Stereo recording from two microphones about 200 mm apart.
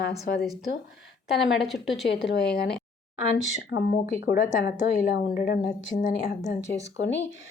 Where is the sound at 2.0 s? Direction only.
60° left (ahead or behind).